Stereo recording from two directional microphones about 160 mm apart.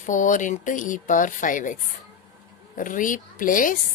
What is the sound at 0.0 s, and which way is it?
A woman's voice, 55° left (ahead or behind).